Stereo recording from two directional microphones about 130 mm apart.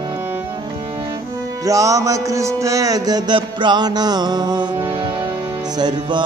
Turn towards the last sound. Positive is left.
turn(degrees=-35)  # may be behind; listen again after turning